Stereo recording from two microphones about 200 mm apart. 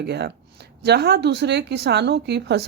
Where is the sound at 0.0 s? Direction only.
55° right (ahead or behind).